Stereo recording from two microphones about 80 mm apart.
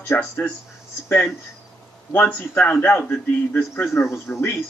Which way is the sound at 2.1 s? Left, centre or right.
Left.